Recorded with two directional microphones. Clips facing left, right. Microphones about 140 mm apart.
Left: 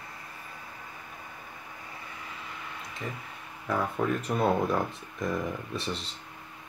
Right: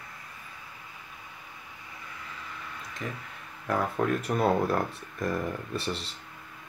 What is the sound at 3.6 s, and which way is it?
Speech, 5° right (ahead or behind).